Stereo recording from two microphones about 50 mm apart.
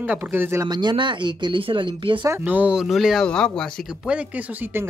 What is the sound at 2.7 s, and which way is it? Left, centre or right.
Speech, centre.